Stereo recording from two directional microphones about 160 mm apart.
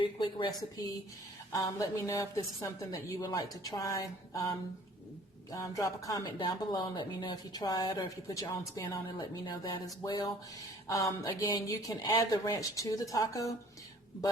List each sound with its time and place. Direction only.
0.0 s speech: 30° left (ahead or behind)
5.5 s speech: 20° left (ahead or behind)